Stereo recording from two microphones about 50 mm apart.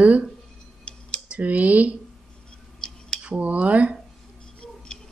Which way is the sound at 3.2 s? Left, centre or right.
Right.